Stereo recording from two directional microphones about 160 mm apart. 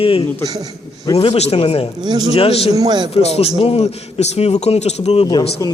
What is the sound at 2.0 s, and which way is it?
Speech, 25° right (ahead or behind).